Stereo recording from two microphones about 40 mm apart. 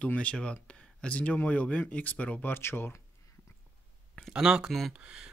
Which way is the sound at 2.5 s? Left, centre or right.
Left.